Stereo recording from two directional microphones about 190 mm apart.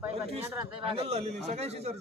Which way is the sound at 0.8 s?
30° right (ahead or behind).